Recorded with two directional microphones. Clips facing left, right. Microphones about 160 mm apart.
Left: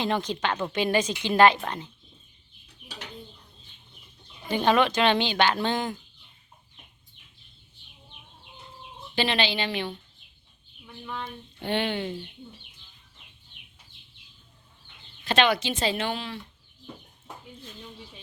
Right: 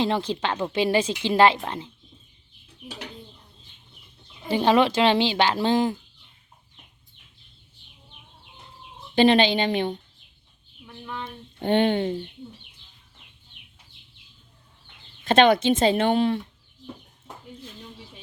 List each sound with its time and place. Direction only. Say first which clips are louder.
0.0 s a woman's voice: right 3 dB; 30° right (ahead or behind)
4.4 s a woman's voice: right 3 dB; 25° right (ahead or behind)
9.1 s a woman's voice: right 9 dB; 45° right (ahead or behind)
11.0 s speech: right 1 dB; centre (ahead or behind)
11.6 s a woman's voice: right 7 dB; 45° right (ahead or behind)
15.2 s a woman's voice: right 6 dB; 50° right (ahead or behind)